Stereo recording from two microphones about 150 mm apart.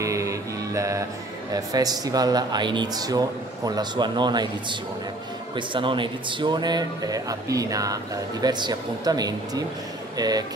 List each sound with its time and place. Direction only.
0.0 s music: 20° right (ahead or behind)
1.5 s speech: 25° right (ahead or behind)